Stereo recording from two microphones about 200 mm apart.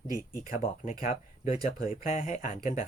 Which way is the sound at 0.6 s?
45° left (ahead or behind).